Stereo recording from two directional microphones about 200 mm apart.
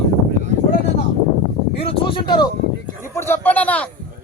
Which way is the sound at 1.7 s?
25° left (ahead or behind).